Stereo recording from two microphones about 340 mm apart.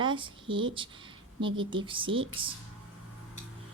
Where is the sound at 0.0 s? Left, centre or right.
Centre.